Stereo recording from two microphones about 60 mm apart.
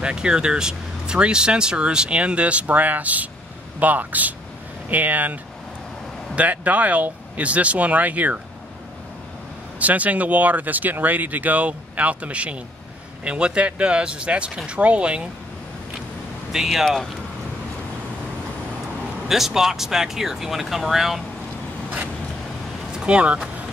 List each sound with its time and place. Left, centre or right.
0.0 s speech: centre
9.8 s speech: right
16.5 s speech: centre
16.8 s speech: centre
19.2 s speech: centre
23.0 s speech: right